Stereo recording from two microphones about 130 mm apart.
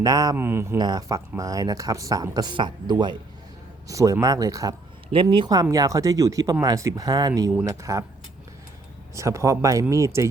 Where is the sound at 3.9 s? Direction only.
25° right (ahead or behind).